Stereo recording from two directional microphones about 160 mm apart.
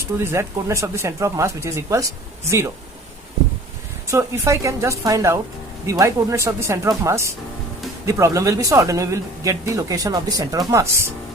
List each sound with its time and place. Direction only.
0.2 s speech: 15° right (ahead or behind)
4.1 s speech: 20° right (ahead or behind)